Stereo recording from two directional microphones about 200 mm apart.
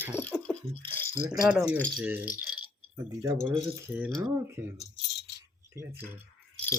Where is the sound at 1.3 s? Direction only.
15° right (ahead or behind).